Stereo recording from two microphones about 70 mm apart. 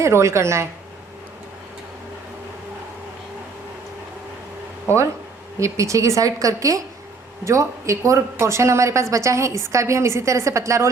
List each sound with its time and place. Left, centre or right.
0.0 s speech: right
5.5 s speech: right